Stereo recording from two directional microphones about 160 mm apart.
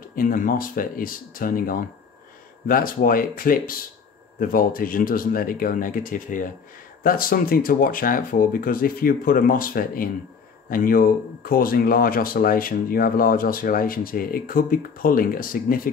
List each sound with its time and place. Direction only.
0.1 s speech: 60° left (ahead or behind)